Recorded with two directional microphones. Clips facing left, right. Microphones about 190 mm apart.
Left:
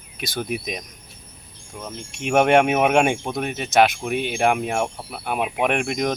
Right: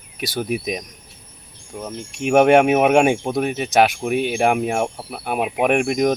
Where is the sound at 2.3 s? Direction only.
5° right (ahead or behind).